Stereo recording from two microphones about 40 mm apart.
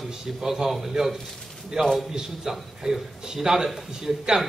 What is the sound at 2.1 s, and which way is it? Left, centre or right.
A man's voice, centre.